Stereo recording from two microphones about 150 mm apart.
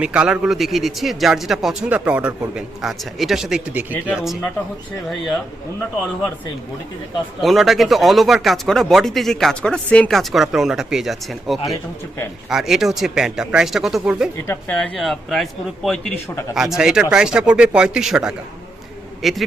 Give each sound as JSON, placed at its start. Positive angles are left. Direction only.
{"t": 0.0, "sound": "speech", "side_deg": -5}
{"t": 7.4, "sound": "speech", "side_deg": 0}
{"t": 11.7, "sound": "speech", "side_deg": 20}
{"t": 12.5, "sound": "speech", "side_deg": 0}
{"t": 14.4, "sound": "speech", "side_deg": 15}
{"t": 14.8, "sound": "speech", "side_deg": 5}